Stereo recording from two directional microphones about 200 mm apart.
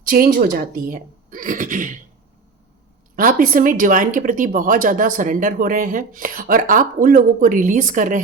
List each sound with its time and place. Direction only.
0.1 s speech: 45° right (ahead or behind)
3.2 s speech: 45° right (ahead or behind)